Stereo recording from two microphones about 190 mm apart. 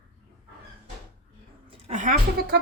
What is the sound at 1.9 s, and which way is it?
Speech, 40° right (ahead or behind).